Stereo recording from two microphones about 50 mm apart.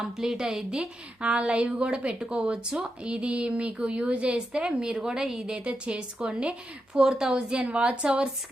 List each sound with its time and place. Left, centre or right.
0.0 s a woman's voice: centre
5.5 s a woman's voice: right
6.9 s a woman's voice: centre